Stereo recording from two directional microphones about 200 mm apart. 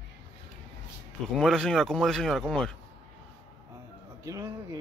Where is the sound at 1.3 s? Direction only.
5° left (ahead or behind).